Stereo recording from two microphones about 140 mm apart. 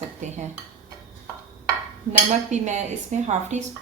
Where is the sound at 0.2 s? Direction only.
60° right (ahead or behind).